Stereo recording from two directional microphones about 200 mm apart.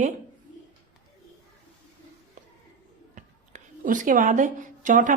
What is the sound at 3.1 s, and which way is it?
A woman's voice, 40° right (ahead or behind).